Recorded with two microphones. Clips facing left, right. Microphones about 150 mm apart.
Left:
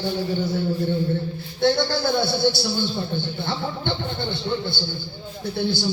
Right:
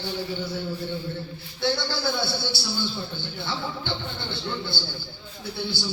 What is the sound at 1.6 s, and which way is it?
A man's voice, 50° left (ahead or behind).